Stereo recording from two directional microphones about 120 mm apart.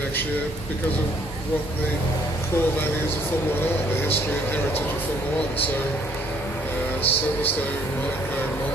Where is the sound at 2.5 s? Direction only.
15° left (ahead or behind).